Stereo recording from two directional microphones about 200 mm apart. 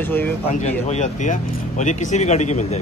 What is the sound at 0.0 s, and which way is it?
Speech, 10° left (ahead or behind).